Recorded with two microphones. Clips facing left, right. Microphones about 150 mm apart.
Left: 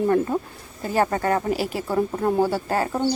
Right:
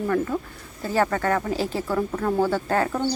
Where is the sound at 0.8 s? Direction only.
15° left (ahead or behind).